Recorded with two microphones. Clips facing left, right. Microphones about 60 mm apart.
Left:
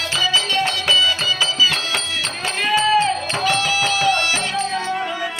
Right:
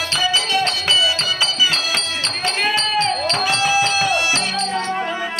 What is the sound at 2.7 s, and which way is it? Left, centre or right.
Music, centre.